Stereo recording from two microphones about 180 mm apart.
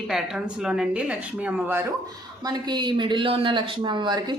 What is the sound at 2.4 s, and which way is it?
Speech, 25° right (ahead or behind).